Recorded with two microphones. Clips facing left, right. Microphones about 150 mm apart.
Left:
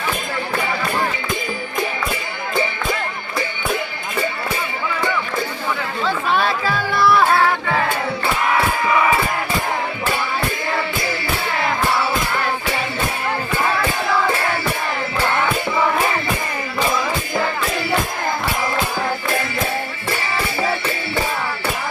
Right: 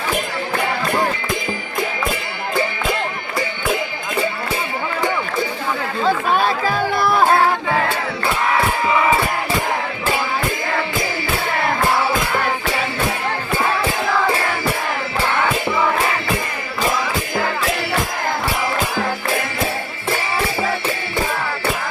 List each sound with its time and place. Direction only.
6.0 s run: 45° right (ahead or behind)